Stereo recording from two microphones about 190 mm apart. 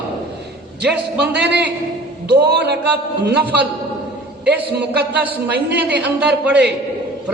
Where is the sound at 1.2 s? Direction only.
60° right (ahead or behind).